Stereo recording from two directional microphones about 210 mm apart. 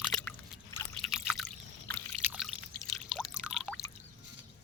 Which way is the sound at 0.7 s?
15° left (ahead or behind).